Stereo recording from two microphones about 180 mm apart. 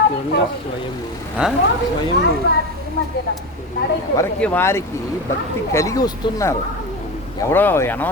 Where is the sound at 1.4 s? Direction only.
5° right (ahead or behind).